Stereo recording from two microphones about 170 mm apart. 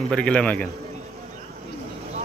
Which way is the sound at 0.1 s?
5° left (ahead or behind).